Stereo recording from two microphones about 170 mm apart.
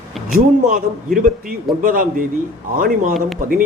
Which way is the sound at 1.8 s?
55° right (ahead or behind).